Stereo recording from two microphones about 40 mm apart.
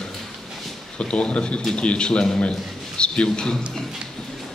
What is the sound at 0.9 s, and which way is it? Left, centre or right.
A man's voice, left.